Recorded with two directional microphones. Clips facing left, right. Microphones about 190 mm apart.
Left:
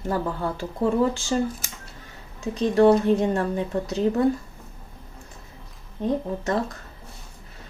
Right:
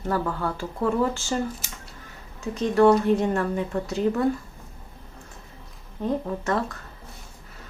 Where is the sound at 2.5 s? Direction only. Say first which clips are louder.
Left 1 dB; 35° left (ahead or behind).